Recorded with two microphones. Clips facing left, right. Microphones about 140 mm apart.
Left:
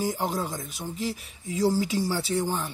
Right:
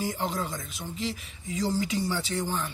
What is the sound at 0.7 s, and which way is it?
Speech, centre (ahead or behind).